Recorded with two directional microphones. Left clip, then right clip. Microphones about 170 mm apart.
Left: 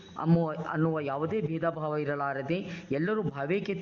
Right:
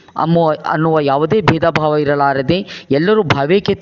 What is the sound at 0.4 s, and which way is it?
Speech, 45° right (ahead or behind).